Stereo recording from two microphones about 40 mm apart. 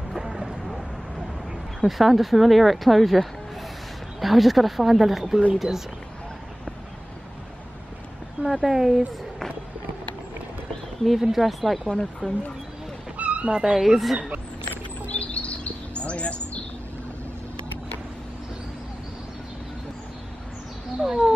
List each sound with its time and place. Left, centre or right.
0.2 s vehicle: centre
1.8 s speech: centre
8.5 s speech: centre
11.3 s speech: centre
11.9 s speech: centre
13.2 s a sound: right
13.6 s speech: centre
14.7 s a sound: left
21.0 s a sound: centre